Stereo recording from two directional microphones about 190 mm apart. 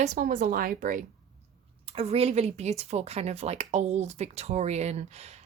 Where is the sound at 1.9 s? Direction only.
30° right (ahead or behind).